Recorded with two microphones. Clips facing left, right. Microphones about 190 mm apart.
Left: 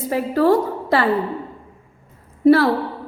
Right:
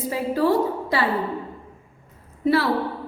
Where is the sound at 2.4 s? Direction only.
45° left (ahead or behind).